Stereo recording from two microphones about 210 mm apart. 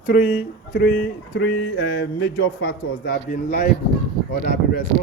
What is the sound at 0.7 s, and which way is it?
Speech, 50° left (ahead or behind).